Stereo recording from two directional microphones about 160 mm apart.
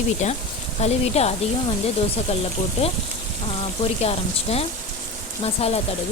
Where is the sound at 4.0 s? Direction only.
40° left (ahead or behind).